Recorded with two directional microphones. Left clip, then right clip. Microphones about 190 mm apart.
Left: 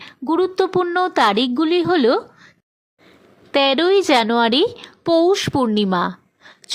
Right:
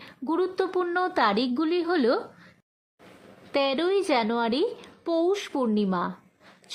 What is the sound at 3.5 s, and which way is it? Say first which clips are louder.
A woman's voice: left 9 dB; 20° left (ahead or behind).